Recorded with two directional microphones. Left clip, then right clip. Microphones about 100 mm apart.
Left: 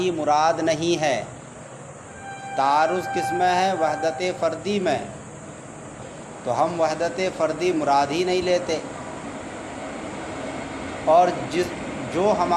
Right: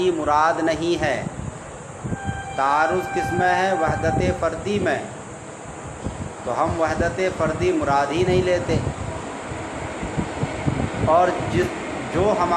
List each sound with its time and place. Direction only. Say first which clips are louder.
0.0 s speech: right 1 dB; 45° left (ahead or behind); by 1.2 s 70° left (ahead or behind)
2.6 s speech: even; 70° left (ahead or behind)
6.5 s speech: even; 60° left (ahead or behind)
11.1 s speech: left 1 dB; 60° left (ahead or behind)
12.2 s speech: even; 70° left (ahead or behind)